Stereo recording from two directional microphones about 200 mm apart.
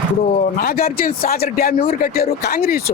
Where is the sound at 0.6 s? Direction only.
45° left (ahead or behind).